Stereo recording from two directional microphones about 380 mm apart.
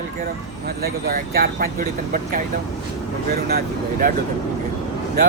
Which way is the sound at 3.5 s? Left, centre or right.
Right.